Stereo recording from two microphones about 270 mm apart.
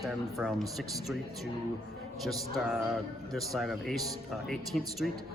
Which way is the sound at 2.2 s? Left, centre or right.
Centre.